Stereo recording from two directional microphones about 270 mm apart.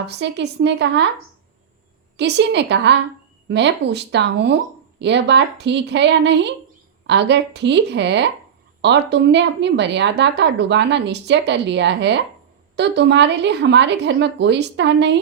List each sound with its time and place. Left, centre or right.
0.1 s a woman's voice: right
2.1 s a woman's voice: right